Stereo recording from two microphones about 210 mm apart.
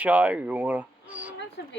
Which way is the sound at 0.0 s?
5° right (ahead or behind).